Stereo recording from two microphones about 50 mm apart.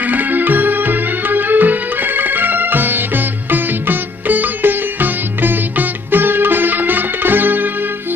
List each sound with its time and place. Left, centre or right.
0.0 s music: right